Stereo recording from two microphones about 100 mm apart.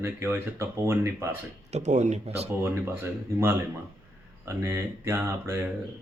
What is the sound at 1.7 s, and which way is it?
Speech, 90° right.